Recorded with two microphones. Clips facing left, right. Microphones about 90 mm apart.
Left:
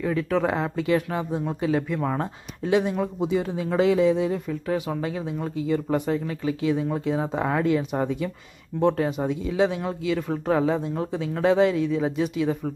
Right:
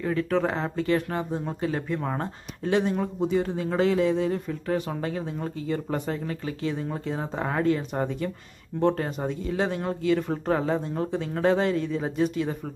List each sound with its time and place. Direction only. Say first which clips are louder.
0.0 s speech: left 1 dB; centre (ahead or behind)